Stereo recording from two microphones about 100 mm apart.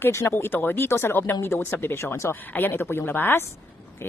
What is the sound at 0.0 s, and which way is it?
Speech, 25° left (ahead or behind).